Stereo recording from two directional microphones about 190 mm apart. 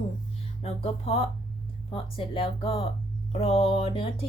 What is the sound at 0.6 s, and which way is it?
A woman's voice, 30° left (ahead or behind).